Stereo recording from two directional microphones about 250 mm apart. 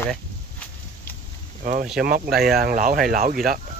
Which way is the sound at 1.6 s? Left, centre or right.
Right.